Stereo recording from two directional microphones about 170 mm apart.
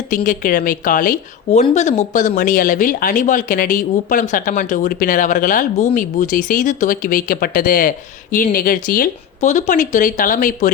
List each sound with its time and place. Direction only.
0.1 s speech: 55° left (ahead or behind)